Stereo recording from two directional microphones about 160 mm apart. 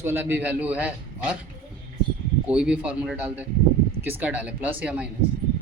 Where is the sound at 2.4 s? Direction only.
5° right (ahead or behind).